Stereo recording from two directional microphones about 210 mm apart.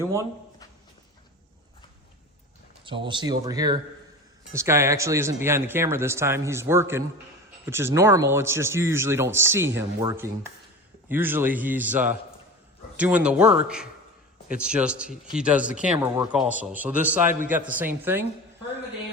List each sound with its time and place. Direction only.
0.0 s speech: 15° right (ahead or behind)
2.8 s speech: 25° right (ahead or behind)